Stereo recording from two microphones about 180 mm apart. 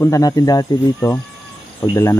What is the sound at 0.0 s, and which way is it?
Speech, 20° left (ahead or behind).